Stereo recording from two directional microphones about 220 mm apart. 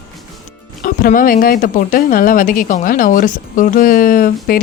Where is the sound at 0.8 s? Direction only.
40° left (ahead or behind).